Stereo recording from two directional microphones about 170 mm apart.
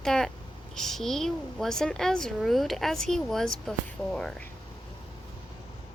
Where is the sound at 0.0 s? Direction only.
5° left (ahead or behind).